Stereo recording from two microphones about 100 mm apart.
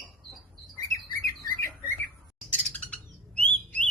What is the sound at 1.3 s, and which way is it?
Squawk, 30° left (ahead or behind).